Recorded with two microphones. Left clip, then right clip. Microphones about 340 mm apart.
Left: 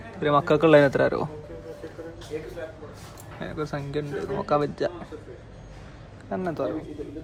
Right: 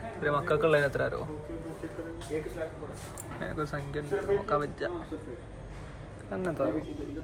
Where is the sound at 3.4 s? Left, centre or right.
Centre.